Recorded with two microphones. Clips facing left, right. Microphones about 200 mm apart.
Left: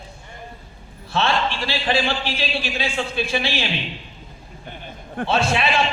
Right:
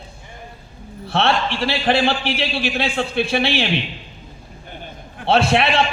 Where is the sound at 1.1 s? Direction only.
65° right (ahead or behind).